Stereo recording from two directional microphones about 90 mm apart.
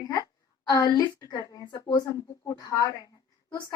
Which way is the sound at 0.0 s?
40° left (ahead or behind).